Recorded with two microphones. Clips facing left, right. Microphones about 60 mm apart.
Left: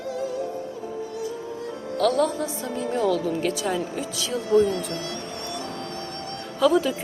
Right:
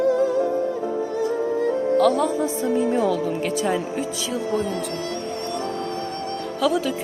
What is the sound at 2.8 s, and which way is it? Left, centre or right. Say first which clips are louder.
Speech: right 1 dB; centre.